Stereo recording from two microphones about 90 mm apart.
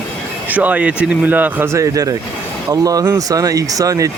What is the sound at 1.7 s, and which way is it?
Speech, 40° right (ahead or behind).